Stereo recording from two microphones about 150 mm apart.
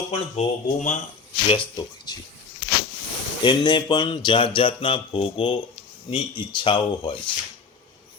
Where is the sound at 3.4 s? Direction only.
30° left (ahead or behind).